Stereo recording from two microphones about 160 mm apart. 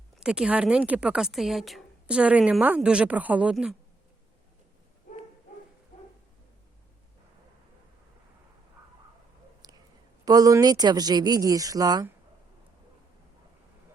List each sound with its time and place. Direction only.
0.2 s a woman's voice: 5° right (ahead or behind)
10.2 s speech: 20° right (ahead or behind)